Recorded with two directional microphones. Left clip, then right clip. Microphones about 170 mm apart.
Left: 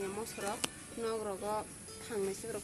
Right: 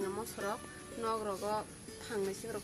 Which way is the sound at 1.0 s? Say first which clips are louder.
Right 1 dB; 35° left (ahead or behind).